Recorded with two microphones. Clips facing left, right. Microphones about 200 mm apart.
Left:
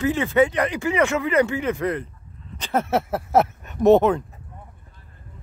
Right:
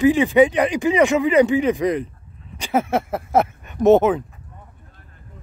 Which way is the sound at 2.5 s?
10° right (ahead or behind).